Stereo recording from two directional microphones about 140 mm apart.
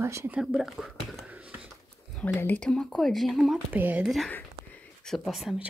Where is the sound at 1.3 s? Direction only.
10° right (ahead or behind).